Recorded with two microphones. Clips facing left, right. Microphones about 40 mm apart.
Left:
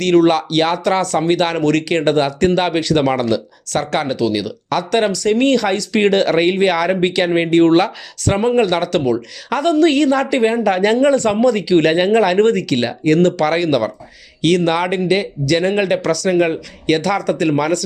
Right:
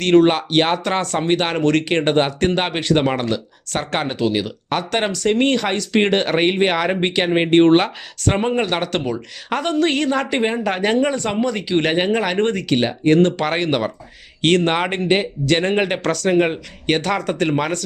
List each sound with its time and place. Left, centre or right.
0.0 s speech: right
12.7 s speech: centre
13.1 s speech: right
15.7 s speech: right
16.0 s speech: right
16.3 s speech: right